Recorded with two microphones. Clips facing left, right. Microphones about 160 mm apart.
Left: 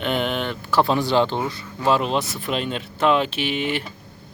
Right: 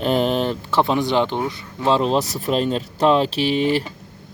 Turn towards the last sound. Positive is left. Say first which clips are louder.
# right 6 dB
turn(degrees=-35)  # may be behind; listen again after turning